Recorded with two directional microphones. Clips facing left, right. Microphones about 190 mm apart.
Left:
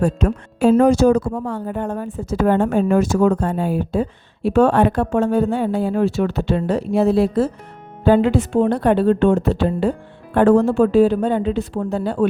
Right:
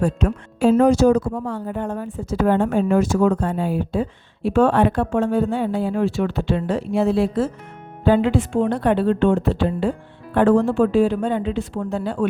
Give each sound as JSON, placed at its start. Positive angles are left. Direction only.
{"t": 0.0, "sound": "a woman's voice", "side_deg": 45}